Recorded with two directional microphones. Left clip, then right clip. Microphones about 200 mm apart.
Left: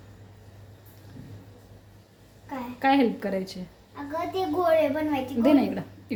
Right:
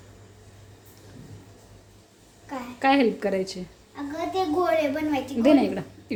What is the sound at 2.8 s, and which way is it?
Speech, 20° right (ahead or behind).